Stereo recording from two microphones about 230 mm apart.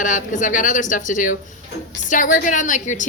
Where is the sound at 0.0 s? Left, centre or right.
Left.